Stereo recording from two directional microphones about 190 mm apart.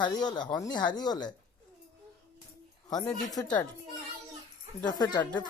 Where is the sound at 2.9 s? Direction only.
20° left (ahead or behind).